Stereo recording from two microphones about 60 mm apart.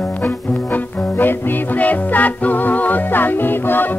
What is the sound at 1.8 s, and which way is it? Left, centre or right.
Music, left.